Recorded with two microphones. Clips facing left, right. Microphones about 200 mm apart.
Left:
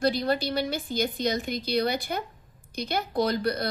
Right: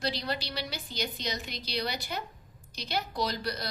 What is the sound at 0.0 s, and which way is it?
A woman's voice, 50° left (ahead or behind).